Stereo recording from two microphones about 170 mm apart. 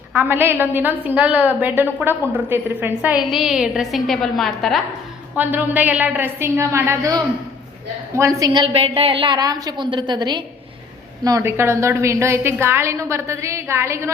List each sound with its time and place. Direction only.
0.1 s a woman's voice: 15° right (ahead or behind)
5.4 s a woman's voice: 10° right (ahead or behind)